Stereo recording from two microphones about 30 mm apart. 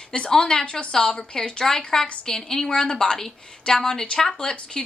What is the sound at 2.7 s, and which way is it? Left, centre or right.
A woman's voice, left.